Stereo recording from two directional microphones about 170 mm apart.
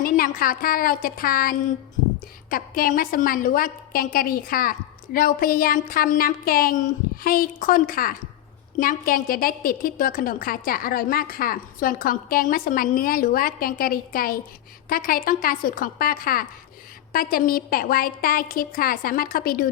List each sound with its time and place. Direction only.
0.0 s a woman's voice: 55° left (ahead or behind)